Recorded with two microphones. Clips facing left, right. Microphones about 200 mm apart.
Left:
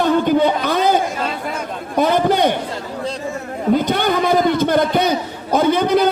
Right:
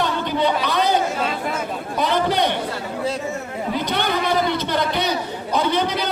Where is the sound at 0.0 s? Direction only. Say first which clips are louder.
Left 7 dB; 50° left (ahead or behind).